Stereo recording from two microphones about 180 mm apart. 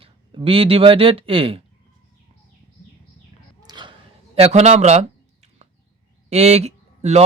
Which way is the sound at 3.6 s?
25° right (ahead or behind).